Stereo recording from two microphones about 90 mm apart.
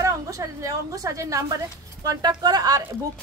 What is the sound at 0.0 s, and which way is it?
A woman's voice, 40° right (ahead or behind).